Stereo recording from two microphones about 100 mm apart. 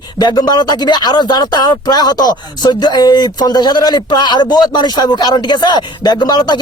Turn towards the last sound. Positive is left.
turn(degrees=45)  # may be behind; listen again after turning